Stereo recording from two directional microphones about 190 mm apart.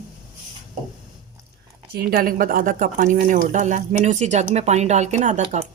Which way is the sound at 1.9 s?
55° right (ahead or behind).